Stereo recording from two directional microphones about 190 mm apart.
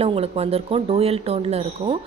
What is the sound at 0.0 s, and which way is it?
A woman's voice, 30° right (ahead or behind).